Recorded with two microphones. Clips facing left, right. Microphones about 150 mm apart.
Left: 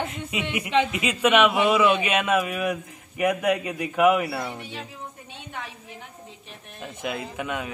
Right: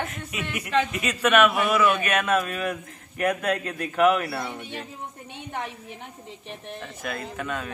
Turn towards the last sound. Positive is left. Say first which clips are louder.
# left 1 dB
turn(degrees=15)  # may be behind; listen again after turning